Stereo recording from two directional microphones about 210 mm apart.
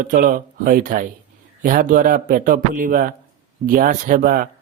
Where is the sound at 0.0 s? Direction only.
40° right (ahead or behind).